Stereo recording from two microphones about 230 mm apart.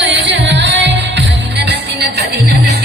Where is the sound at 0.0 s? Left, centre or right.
Right.